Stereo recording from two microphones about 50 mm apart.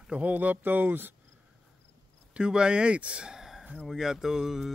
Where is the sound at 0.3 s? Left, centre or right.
Right.